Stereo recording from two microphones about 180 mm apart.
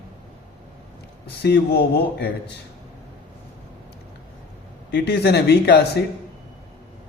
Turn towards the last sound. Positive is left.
turn(degrees=65)  # may be behind; listen again after turning